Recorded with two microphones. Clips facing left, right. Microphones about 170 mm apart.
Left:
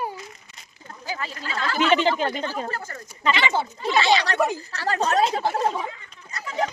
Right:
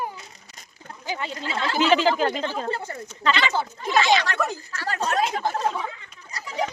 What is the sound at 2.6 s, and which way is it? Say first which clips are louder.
Speech: right 3 dB; 25° right (ahead or behind).